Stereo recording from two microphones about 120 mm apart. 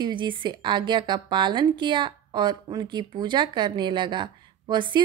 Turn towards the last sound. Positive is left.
turn(degrees=-40)  # may be behind; listen again after turning